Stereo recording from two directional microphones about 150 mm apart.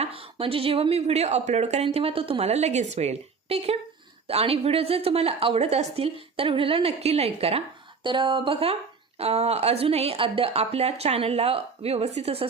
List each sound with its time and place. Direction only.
0.0 s speech: 40° right (ahead or behind)